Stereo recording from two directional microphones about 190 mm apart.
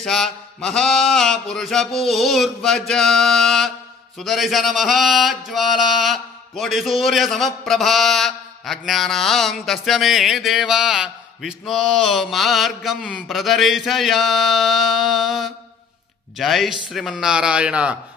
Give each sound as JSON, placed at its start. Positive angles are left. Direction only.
{"t": 0.0, "sound": "a man's voice", "side_deg": 0}